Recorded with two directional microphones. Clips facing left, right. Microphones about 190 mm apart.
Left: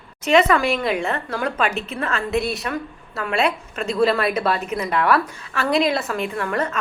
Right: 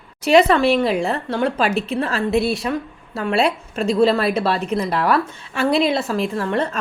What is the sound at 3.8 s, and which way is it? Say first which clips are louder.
Speech: right 3 dB; centre (ahead or behind).